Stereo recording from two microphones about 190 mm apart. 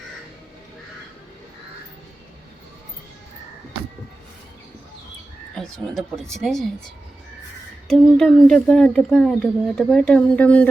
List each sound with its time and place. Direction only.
5.5 s speech: centre (ahead or behind)
7.9 s speech: 5° left (ahead or behind)